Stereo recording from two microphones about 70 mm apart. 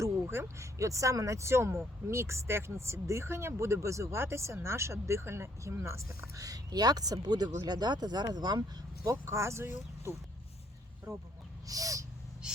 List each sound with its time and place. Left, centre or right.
0.3 s speech: right
9.0 s speech: right
11.6 s a sound: right
12.4 s gasp: centre